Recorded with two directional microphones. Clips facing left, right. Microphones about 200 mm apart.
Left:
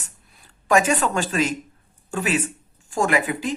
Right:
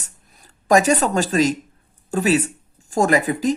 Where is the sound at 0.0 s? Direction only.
40° right (ahead or behind).